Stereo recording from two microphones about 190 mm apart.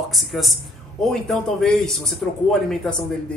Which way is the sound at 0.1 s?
Centre (ahead or behind).